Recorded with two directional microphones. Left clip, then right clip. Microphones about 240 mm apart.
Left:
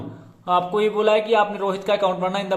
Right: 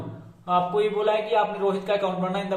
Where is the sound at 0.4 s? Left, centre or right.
Left.